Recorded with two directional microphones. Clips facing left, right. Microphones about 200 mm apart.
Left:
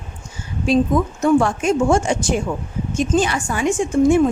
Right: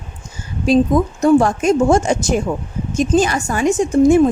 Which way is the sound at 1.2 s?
40° right (ahead or behind).